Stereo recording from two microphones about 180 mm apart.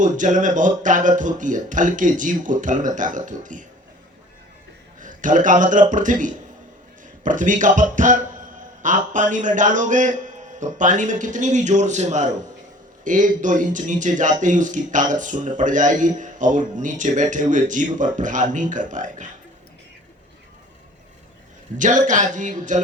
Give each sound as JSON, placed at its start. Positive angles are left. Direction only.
{"t": 0.0, "sound": "speech", "side_deg": -45}
{"t": 4.9, "sound": "a man's voice", "side_deg": -45}
{"t": 21.8, "sound": "speech", "side_deg": -45}